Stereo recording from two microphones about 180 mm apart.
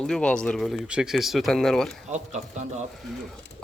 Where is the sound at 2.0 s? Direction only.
40° right (ahead or behind).